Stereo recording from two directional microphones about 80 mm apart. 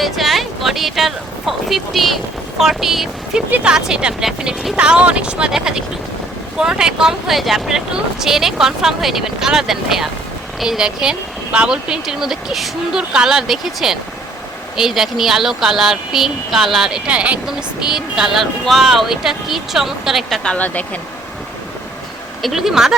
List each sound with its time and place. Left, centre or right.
0.0 s speech: centre
20.4 s speech: centre
22.4 s speech: centre